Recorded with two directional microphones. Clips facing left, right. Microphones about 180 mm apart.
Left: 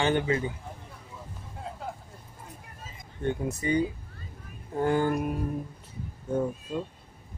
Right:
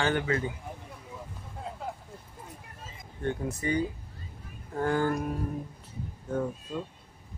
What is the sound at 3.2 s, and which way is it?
Speech, 20° left (ahead or behind).